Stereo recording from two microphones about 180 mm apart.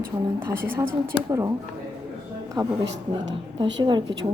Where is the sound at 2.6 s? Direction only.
25° right (ahead or behind).